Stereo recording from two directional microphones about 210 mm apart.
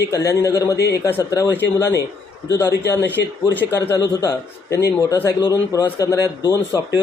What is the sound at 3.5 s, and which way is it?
Speech, 10° left (ahead or behind).